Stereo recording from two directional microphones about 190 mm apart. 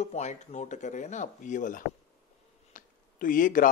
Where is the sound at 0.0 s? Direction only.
35° left (ahead or behind).